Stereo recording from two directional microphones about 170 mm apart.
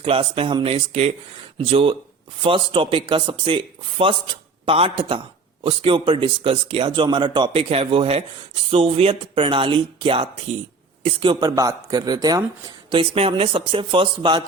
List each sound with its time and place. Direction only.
0.0 s speech: 30° right (ahead or behind)